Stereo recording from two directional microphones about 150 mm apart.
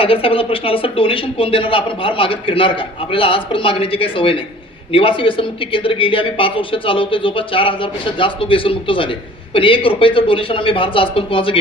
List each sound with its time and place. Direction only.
0.0 s speech: 40° left (ahead or behind)